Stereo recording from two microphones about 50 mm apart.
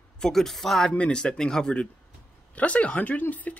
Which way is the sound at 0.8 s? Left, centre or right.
Centre.